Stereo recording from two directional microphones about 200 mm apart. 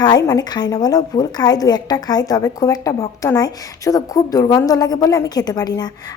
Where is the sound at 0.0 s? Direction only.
20° left (ahead or behind).